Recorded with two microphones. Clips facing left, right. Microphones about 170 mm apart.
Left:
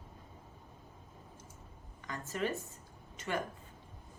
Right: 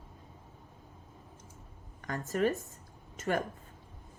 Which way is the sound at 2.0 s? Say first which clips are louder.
Right 6 dB; 45° right (ahead or behind).